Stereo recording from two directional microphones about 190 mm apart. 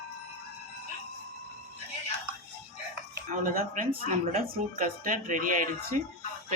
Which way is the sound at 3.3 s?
40° right (ahead or behind).